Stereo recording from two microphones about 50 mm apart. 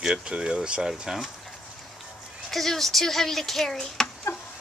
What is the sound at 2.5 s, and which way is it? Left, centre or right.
Speech, centre.